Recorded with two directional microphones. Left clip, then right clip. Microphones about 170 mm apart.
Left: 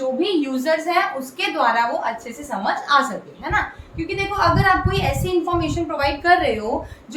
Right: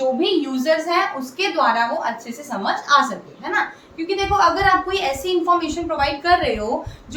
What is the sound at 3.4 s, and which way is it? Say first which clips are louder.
Speech: left 1 dB; 30° left (ahead or behind).